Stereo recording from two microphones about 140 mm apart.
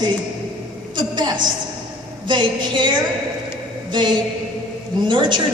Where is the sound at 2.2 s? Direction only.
35° right (ahead or behind).